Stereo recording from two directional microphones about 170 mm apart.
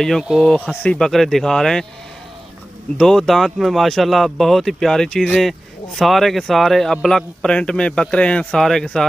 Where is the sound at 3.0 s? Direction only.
Centre (ahead or behind).